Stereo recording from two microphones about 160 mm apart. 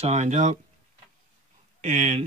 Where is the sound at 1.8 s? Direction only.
45° right (ahead or behind).